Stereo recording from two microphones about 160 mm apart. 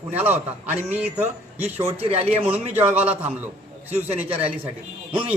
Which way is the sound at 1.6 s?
40° right (ahead or behind).